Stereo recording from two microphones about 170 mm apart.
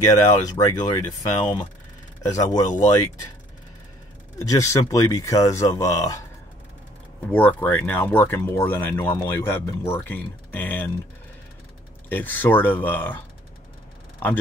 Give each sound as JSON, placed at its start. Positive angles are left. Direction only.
{"t": 0.1, "sound": "speech", "side_deg": 20}
{"t": 4.4, "sound": "speech", "side_deg": 15}
{"t": 7.2, "sound": "speech", "side_deg": 10}
{"t": 12.1, "sound": "speech", "side_deg": 10}